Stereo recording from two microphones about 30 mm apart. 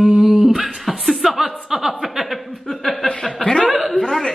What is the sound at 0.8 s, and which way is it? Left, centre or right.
Speech, centre.